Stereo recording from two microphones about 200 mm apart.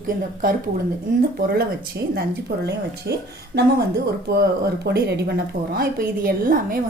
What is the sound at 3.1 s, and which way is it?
Speech, 55° right (ahead or behind).